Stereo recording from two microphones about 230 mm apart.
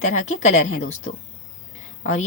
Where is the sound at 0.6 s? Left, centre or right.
Left.